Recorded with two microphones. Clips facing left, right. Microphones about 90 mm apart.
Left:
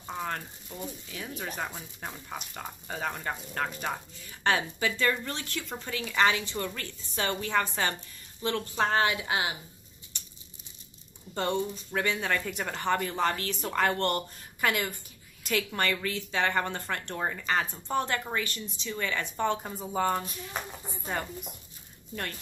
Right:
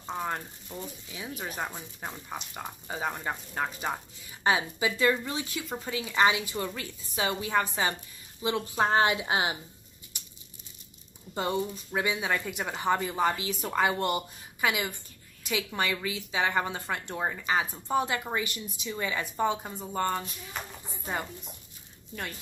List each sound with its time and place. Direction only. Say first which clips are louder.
0.1 s a sound: right 2 dB; 10° right (ahead or behind)
1.0 s speech: even; 10° right (ahead or behind)
11.3 s speech: even; 5° right (ahead or behind)